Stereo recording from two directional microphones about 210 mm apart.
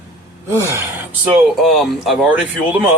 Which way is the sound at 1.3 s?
Centre (ahead or behind).